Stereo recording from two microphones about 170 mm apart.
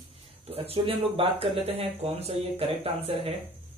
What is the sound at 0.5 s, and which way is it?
Speech, 35° right (ahead or behind).